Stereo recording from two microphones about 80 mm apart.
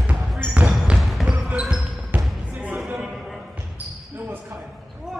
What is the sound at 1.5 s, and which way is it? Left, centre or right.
Basketball bounce, centre.